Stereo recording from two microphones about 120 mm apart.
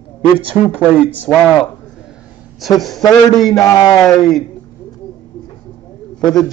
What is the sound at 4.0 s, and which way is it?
Speech, 5° left (ahead or behind).